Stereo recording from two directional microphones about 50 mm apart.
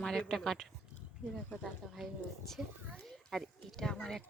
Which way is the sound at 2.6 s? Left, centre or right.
Right.